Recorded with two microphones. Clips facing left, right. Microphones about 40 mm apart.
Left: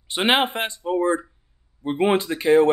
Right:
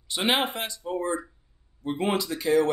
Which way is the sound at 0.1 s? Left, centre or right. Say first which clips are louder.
Left 5 dB; left.